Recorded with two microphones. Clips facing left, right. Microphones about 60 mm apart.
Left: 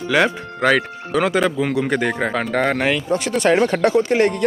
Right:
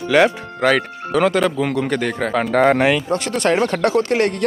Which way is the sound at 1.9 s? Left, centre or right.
Centre.